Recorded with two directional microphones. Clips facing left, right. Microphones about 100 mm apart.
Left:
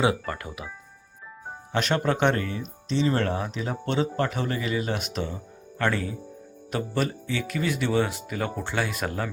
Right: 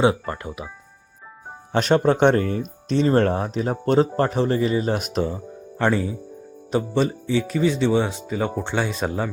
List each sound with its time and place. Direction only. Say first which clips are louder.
0.0 s speech: right 5 dB; 25° right (ahead or behind)
1.7 s speech: right 7 dB; 35° right (ahead or behind)
2.5 s speech: right 6 dB; 50° right (ahead or behind)
3.1 s speech: right 7 dB; 40° right (ahead or behind)
4.9 s speech: right 7 dB; 45° right (ahead or behind)
5.8 s speech: right 5 dB; 25° right (ahead or behind)